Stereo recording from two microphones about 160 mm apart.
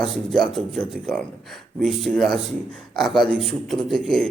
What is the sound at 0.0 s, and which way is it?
A man's voice, centre (ahead or behind).